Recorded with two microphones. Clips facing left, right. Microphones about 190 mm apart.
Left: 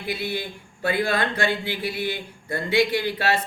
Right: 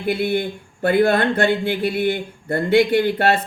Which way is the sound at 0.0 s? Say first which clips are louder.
Right 8 dB; 55° right (ahead or behind).